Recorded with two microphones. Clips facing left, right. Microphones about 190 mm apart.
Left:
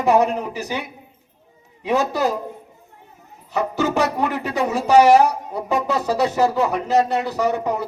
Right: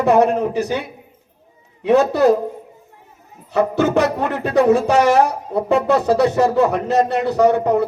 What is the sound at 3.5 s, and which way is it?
Speech, 60° right (ahead or behind).